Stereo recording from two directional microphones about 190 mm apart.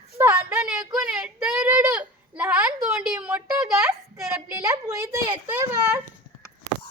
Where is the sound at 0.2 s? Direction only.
10° right (ahead or behind).